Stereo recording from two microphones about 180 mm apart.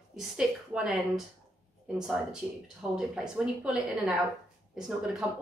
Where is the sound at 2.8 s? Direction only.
Centre (ahead or behind).